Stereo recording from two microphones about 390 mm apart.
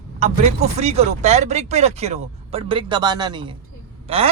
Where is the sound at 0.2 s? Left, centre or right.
Centre.